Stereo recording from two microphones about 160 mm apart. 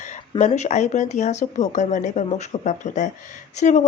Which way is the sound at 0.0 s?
45° left (ahead or behind).